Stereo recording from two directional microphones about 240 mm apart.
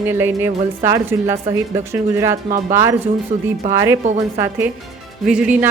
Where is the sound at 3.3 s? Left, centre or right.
Right.